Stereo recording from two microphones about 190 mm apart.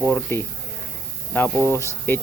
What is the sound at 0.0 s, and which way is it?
Speech, 10° left (ahead or behind).